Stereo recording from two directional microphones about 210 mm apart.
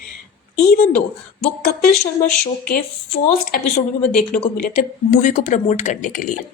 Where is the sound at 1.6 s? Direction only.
45° left (ahead or behind).